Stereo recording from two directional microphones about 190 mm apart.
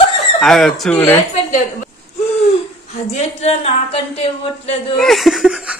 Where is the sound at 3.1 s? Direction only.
35° left (ahead or behind).